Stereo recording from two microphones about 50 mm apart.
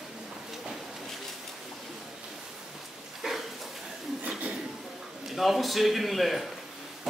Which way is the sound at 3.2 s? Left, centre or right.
Centre.